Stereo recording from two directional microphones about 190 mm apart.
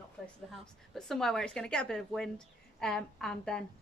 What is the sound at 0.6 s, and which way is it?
A woman's voice, centre (ahead or behind).